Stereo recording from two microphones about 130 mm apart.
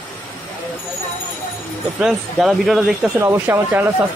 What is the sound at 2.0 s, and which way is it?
Speech, 5° right (ahead or behind).